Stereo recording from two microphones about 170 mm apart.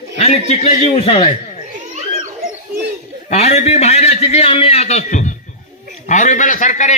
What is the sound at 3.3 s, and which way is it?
A man's voice, 40° left (ahead or behind).